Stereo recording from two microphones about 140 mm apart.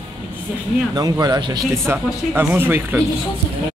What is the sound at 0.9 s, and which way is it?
Speech, 25° right (ahead or behind).